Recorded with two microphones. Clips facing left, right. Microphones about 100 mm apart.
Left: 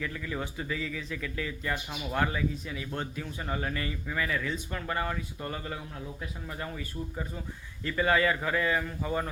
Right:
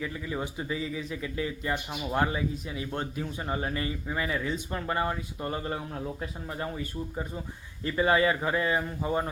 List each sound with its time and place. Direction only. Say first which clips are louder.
0.0 s speech: right 2 dB; 20° right (ahead or behind)